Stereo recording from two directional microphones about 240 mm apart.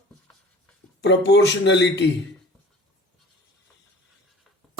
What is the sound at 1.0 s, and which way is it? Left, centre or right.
Speech, left.